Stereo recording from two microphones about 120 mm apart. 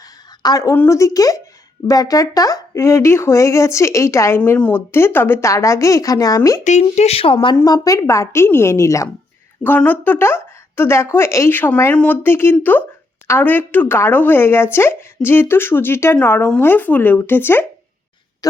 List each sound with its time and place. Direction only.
0.0 s a sound: 30° left (ahead or behind)
0.8 s speech: 25° left (ahead or behind)
6.7 s speech: 75° left (ahead or behind); by 7.3 s 55° left (ahead or behind)
7.5 s speech: 30° left (ahead or behind)